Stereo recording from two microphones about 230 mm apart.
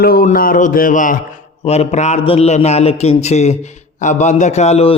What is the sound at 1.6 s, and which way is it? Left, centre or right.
A man's voice, left.